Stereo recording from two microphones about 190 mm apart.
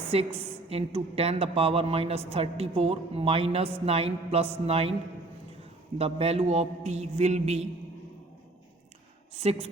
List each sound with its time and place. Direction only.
0.1 s speech: 30° right (ahead or behind)
6.0 s speech: 30° right (ahead or behind)
9.3 s speech: 30° right (ahead or behind)